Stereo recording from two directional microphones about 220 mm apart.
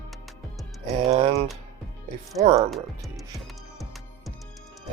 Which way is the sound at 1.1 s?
30° right (ahead or behind).